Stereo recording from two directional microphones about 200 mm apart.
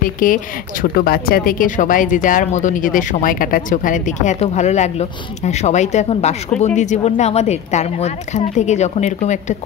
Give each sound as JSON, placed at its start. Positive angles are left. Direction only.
{"t": 0.0, "sound": "speech", "side_deg": 40}